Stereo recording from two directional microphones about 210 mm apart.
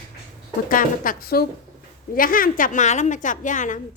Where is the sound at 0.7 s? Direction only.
40° left (ahead or behind).